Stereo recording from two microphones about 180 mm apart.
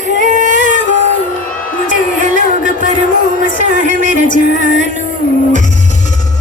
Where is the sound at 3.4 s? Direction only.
50° left (ahead or behind).